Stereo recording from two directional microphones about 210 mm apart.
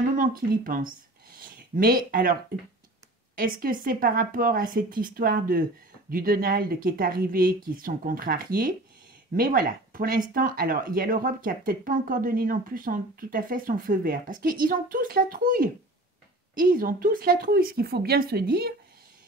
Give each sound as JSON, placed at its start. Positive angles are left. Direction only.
{"t": 0.1, "sound": "speech", "side_deg": -40}
{"t": 3.3, "sound": "speech", "side_deg": -45}